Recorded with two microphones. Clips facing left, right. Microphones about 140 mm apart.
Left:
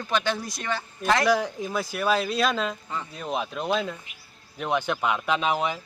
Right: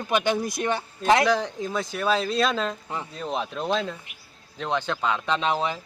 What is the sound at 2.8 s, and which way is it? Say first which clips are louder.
Speech: right 1 dB; 20° right (ahead or behind).